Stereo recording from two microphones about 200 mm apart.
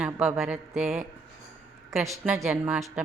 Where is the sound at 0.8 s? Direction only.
5° right (ahead or behind).